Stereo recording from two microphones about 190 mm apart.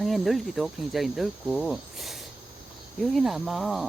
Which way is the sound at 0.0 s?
Centre (ahead or behind).